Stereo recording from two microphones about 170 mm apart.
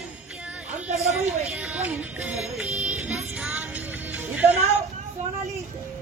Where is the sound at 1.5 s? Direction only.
5° right (ahead or behind).